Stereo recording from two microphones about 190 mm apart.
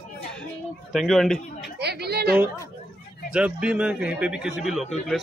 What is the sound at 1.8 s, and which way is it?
Speech, 60° right (ahead or behind).